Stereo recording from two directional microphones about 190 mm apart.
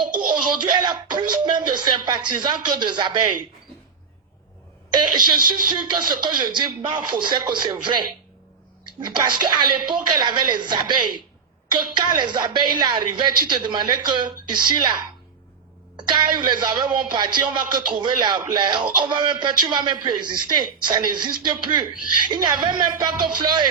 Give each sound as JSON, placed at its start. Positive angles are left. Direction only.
{"t": 0.1, "sound": "music", "side_deg": -45}
{"t": 0.3, "sound": "speech", "side_deg": -25}
{"t": 4.9, "sound": "a woman's voice", "side_deg": -25}
{"t": 16.0, "sound": "speech", "side_deg": -25}